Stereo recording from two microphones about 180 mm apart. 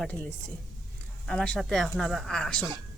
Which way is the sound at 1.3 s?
5° left (ahead or behind).